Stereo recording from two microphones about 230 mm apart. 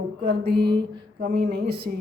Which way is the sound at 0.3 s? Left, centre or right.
Right.